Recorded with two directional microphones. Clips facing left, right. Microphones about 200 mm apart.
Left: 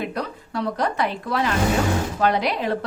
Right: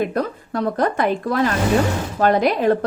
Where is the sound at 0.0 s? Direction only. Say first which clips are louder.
Right 6 dB; 50° right (ahead or behind).